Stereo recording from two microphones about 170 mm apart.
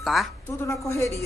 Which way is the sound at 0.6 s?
15° left (ahead or behind).